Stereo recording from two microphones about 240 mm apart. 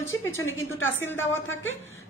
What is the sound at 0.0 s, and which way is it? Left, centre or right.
Speech, centre.